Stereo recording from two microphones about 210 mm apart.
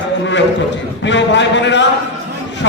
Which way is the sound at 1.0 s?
60° left (ahead or behind).